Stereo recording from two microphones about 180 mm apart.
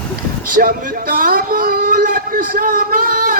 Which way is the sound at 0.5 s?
50° right (ahead or behind).